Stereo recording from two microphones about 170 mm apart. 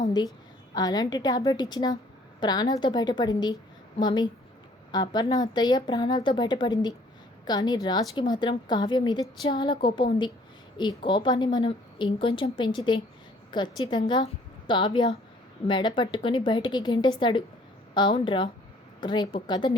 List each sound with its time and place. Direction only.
0.7 s a woman's voice: 25° left (ahead or behind)